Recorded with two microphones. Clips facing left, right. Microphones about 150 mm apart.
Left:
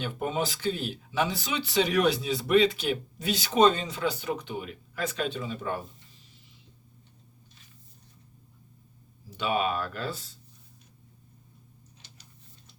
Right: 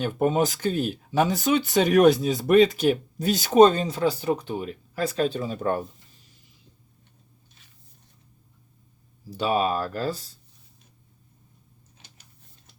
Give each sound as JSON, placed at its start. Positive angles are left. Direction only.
{"t": 0.0, "sound": "speech", "side_deg": -45}
{"t": 9.3, "sound": "speech", "side_deg": -35}